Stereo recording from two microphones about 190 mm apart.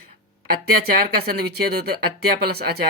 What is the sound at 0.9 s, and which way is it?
Speech, 55° right (ahead or behind).